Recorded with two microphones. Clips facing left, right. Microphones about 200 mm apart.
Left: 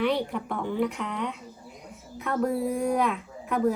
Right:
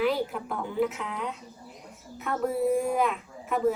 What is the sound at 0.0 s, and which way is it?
A woman's voice, 5° right (ahead or behind).